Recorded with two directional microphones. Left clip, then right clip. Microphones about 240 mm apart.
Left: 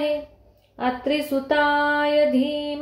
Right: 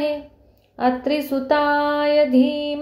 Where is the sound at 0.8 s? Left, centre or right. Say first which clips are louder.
Right 3 dB; right.